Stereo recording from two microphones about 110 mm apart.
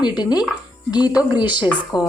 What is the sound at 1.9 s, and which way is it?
Speech, 40° left (ahead or behind).